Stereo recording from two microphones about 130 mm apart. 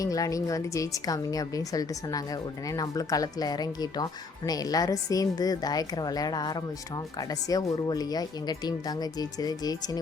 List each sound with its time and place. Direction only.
0.0 s a woman's voice: 25° left (ahead or behind)